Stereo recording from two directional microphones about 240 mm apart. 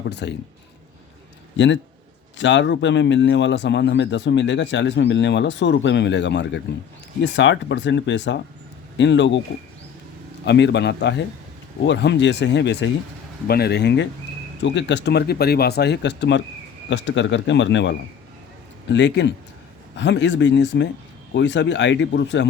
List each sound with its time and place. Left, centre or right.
0.1 s a man's voice: left
1.5 s a man's voice: left
10.4 s a man's voice: left